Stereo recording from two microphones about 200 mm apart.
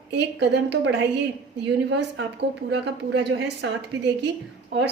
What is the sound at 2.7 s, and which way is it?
A woman's voice, 60° right (ahead or behind).